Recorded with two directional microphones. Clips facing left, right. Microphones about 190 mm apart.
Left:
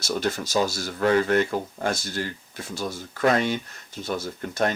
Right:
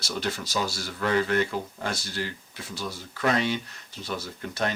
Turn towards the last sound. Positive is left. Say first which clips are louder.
# left 4 dB
turn(degrees=45)  # may be behind; listen again after turning